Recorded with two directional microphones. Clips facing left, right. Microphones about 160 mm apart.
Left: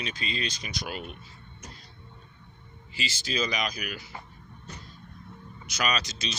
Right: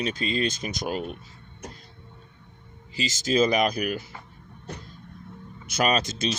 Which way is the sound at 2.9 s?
40° right (ahead or behind).